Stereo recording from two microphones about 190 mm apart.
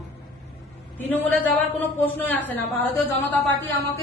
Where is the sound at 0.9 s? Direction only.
10° left (ahead or behind).